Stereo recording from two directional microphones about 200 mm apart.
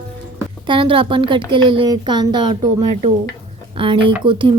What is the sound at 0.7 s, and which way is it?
Speech, 25° right (ahead or behind).